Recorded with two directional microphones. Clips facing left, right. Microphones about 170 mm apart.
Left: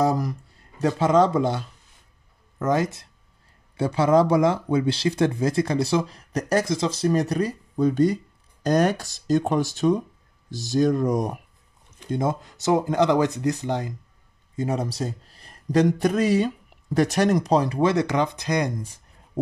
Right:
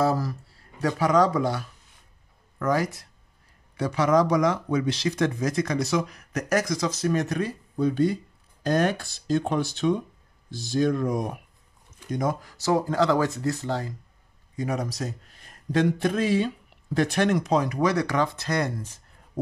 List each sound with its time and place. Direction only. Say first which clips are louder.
0.0 s speech: left 2 dB; 15° left (ahead or behind); by 11.3 s 45° left (ahead or behind)
12.0 s speech: left 2 dB; 25° left (ahead or behind)